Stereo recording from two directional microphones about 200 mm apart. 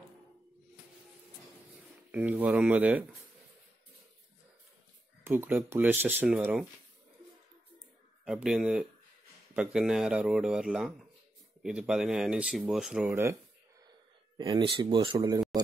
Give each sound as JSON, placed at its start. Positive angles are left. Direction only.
{"t": 2.0, "sound": "speech", "side_deg": -5}
{"t": 5.2, "sound": "speech", "side_deg": -10}
{"t": 8.3, "sound": "speech", "side_deg": -5}
{"t": 14.3, "sound": "speech", "side_deg": -25}